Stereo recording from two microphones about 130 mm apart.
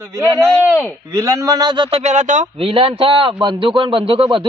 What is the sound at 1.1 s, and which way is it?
Speech, 25° right (ahead or behind).